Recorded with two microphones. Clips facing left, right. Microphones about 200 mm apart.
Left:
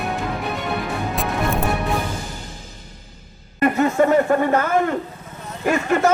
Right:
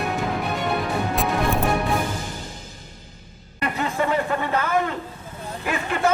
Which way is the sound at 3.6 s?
45° left (ahead or behind).